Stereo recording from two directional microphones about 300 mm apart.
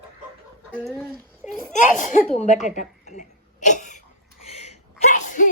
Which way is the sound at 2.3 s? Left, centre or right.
Left.